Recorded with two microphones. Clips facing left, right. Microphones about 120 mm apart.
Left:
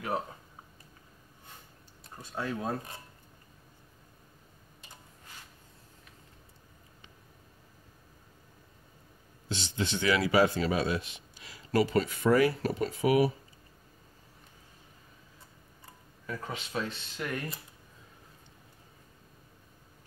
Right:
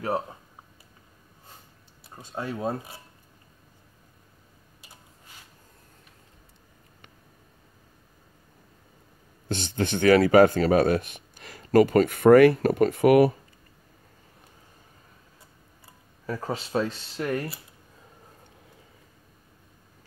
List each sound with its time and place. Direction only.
2.3 s speech: 25° right (ahead or behind)
9.5 s speech: 55° right (ahead or behind)
16.3 s speech: 35° right (ahead or behind)